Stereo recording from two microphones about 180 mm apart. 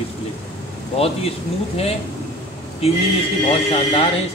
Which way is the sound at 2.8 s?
35° left (ahead or behind).